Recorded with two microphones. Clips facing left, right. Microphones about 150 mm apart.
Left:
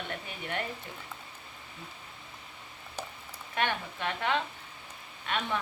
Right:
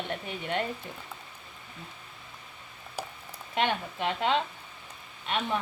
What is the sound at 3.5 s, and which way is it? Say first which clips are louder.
Speech: right 3 dB; 20° right (ahead or behind).